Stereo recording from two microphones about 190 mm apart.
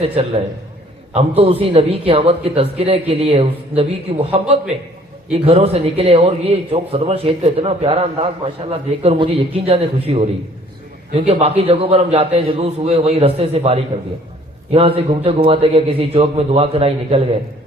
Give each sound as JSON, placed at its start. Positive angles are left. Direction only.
{"t": 0.0, "sound": "a man's voice", "side_deg": -30}